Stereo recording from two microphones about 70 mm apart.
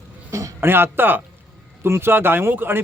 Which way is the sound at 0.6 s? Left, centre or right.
Right.